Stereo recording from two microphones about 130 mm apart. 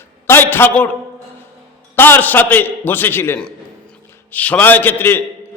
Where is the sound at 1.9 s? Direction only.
15° left (ahead or behind).